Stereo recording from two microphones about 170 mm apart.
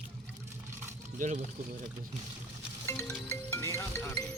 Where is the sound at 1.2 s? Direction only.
45° right (ahead or behind).